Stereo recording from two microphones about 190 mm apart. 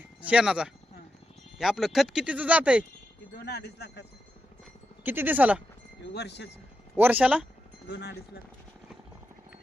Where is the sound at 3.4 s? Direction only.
60° left (ahead or behind).